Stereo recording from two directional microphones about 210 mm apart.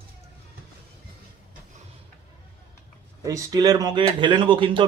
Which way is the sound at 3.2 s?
15° right (ahead or behind).